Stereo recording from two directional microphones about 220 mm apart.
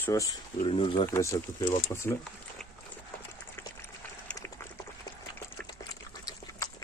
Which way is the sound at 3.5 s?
10° left (ahead or behind).